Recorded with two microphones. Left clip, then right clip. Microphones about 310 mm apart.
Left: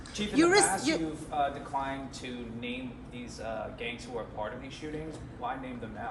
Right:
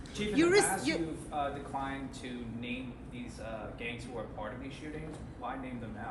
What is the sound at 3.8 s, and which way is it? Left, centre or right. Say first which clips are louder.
Speech: even; left.